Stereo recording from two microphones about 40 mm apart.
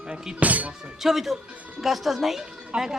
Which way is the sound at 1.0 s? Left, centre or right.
Centre.